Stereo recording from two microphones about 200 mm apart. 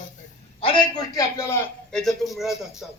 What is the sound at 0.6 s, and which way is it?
Speech, 20° left (ahead or behind).